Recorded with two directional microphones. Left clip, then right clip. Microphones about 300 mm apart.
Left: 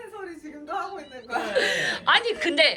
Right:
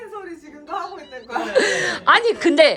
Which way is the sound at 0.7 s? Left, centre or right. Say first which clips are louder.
Right 3 dB; centre.